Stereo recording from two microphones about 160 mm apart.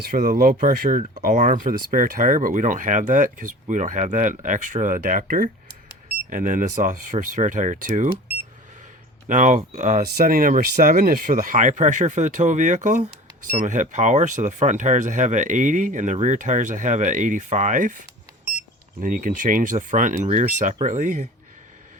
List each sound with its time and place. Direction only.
0.0 s speech: 60° right (ahead or behind)
9.3 s speech: 50° right (ahead or behind)